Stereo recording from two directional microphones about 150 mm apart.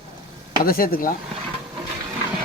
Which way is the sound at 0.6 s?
75° left (ahead or behind).